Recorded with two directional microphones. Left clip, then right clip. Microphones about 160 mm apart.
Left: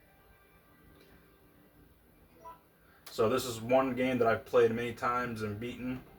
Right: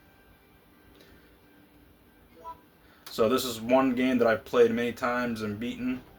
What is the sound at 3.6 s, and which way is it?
Speech, 75° right (ahead or behind).